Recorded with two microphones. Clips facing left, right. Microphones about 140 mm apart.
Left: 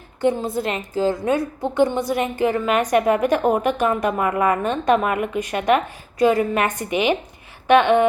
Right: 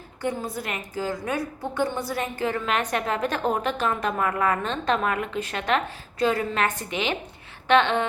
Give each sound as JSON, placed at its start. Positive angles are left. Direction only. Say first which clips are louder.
{"t": 0.2, "sound": "a woman's voice", "louder": "left 8 dB", "side_deg": 25}